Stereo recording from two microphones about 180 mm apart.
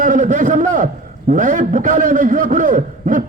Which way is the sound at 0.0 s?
45° right (ahead or behind).